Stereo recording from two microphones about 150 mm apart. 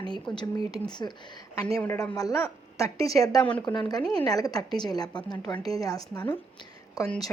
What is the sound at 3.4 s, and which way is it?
Speech, 10° left (ahead or behind).